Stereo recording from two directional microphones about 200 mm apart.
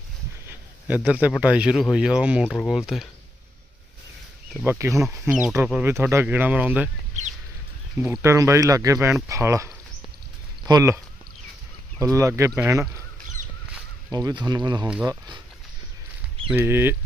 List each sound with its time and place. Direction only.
0.4 s a sound: 10° right (ahead or behind)
1.4 s speech: 5° right (ahead or behind)
4.6 s speech: 15° right (ahead or behind)
7.9 s speech: 10° right (ahead or behind)
14.1 s speech: 20° right (ahead or behind)
14.8 s speech: 10° right (ahead or behind)
16.5 s speech: 10° right (ahead or behind)